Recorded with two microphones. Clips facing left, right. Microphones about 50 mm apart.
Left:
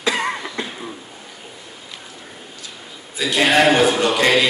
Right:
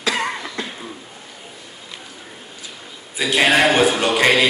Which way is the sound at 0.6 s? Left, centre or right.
Centre.